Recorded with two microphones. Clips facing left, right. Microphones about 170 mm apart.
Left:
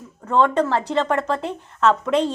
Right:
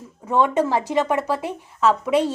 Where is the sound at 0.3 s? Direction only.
10° right (ahead or behind).